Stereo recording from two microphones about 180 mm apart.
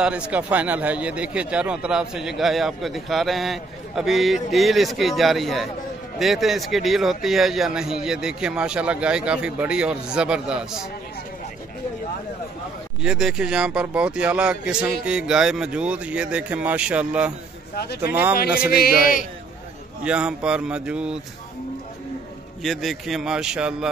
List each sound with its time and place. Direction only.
0.0 s a man's voice: 5° right (ahead or behind)
13.0 s a man's voice: 5° right (ahead or behind)
18.6 s a man's voice: 55° left (ahead or behind)
20.0 s a man's voice: 5° right (ahead or behind)
22.6 s a man's voice: centre (ahead or behind)